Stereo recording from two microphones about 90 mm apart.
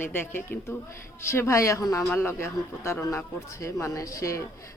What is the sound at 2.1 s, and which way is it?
Speech, 30° left (ahead or behind).